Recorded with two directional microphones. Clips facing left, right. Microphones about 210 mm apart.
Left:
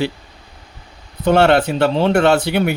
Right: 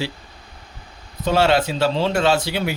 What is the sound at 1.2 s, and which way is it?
Speech, 60° left (ahead or behind).